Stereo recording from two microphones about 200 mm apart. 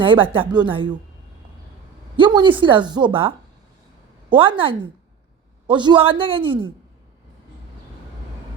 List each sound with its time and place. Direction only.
0.0 s a woman's voice: 25° right (ahead or behind)
2.1 s a woman's voice: 25° right (ahead or behind)